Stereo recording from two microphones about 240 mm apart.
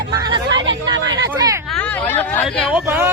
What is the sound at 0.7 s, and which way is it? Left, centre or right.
Speech, right.